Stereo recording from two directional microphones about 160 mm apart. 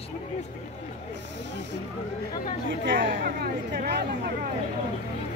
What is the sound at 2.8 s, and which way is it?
Speech, 90° right.